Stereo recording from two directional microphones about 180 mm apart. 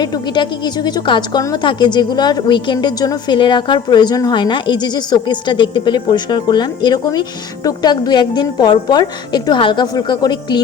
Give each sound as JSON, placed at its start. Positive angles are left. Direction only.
{"t": 0.0, "sound": "a woman's voice", "side_deg": 25}